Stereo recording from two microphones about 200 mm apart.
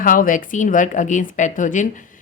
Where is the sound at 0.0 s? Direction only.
40° left (ahead or behind).